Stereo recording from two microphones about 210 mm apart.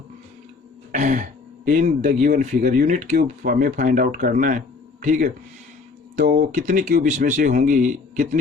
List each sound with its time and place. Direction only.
0.9 s speech: 35° right (ahead or behind)